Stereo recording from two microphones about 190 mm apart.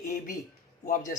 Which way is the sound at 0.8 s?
45° left (ahead or behind).